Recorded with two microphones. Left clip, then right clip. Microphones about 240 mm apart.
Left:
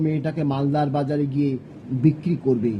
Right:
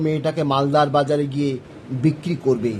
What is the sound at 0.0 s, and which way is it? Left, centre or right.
Speech, right.